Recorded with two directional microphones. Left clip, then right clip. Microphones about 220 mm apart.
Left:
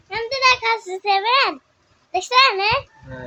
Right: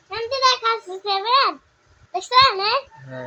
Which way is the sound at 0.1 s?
25° left (ahead or behind).